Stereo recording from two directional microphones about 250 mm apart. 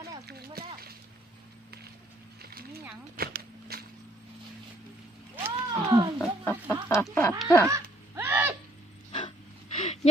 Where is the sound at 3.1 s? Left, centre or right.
Right.